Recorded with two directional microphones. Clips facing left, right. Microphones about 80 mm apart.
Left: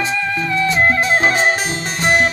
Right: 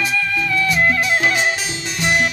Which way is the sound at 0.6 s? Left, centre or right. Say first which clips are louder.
Left 3 dB; left.